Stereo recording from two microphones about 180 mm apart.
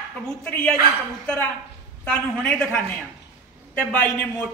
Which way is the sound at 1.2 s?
5° left (ahead or behind).